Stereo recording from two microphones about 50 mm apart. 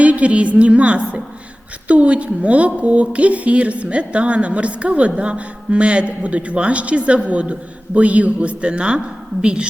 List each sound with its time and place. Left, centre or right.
0.0 s a woman's voice: right